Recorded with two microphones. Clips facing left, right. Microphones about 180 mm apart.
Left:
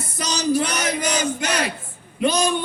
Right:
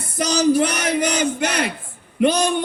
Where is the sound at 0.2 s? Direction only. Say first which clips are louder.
Right 5 dB; 60° right (ahead or behind).